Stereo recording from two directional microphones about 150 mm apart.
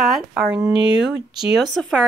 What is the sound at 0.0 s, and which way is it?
Speech, centre (ahead or behind).